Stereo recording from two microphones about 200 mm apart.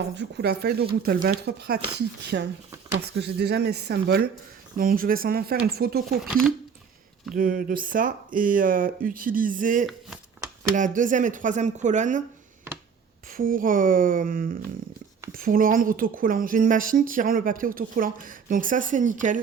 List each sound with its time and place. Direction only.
0.1 s speech: 60° right (ahead or behind)
6.2 s speech: centre (ahead or behind)
7.3 s speech: 45° right (ahead or behind)
13.3 s speech: 45° right (ahead or behind)